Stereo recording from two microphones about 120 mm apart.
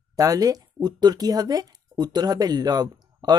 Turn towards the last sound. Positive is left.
turn(degrees=-35)  # may be behind; listen again after turning